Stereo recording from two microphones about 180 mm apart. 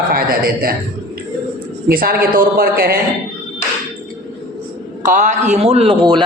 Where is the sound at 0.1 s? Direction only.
55° right (ahead or behind).